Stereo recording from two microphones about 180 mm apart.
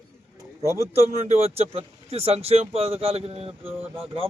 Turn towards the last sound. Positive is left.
turn(degrees=-10)  # may be behind; listen again after turning